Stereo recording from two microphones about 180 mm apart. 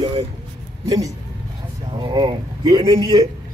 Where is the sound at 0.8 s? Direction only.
20° right (ahead or behind).